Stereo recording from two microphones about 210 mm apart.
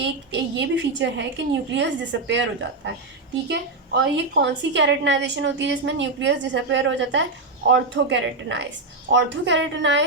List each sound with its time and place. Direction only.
0.0 s a woman's voice: 55° right (ahead or behind)